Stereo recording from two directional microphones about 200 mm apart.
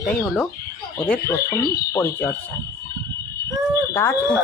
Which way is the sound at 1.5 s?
50° left (ahead or behind).